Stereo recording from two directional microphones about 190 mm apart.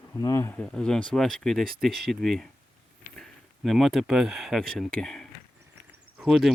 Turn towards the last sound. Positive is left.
turn(degrees=0)  # may be behind; listen again after turning